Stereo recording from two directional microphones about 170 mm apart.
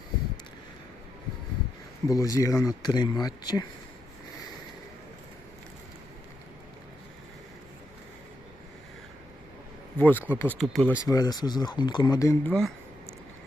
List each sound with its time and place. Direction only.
2.0 s speech: 20° left (ahead or behind)
10.0 s speech: 10° left (ahead or behind)
11.0 s speech: 20° left (ahead or behind)
12.5 s speech: 5° left (ahead or behind)